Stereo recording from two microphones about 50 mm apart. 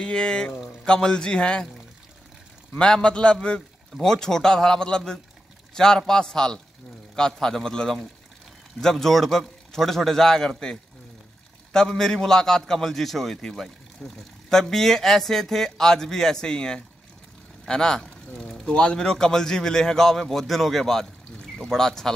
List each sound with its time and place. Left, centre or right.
0.0 s a man's voice: centre
2.8 s speech: centre